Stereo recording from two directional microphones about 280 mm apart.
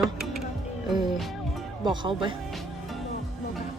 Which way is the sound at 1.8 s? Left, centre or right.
Centre.